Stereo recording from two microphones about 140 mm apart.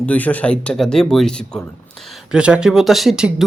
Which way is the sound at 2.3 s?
5° right (ahead or behind).